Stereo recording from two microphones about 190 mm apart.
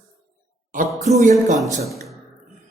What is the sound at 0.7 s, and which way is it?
Speech, 40° right (ahead or behind).